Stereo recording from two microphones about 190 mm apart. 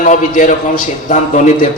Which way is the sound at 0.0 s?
45° left (ahead or behind).